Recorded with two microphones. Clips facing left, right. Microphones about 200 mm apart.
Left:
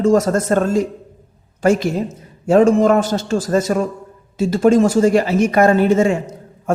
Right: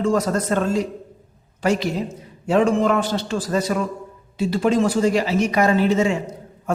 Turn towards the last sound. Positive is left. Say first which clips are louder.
# left 4 dB
turn(degrees=50)  # may be behind; listen again after turning